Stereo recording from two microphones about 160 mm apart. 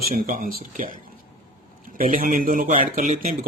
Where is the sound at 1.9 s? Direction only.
60° right (ahead or behind).